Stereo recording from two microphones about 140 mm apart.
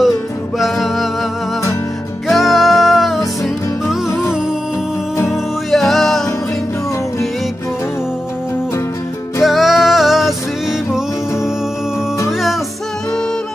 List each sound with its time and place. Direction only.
0.6 s music: centre (ahead or behind)
2.2 s music: centre (ahead or behind)
5.3 s music: centre (ahead or behind)
9.4 s music: centre (ahead or behind)
12.3 s music: centre (ahead or behind)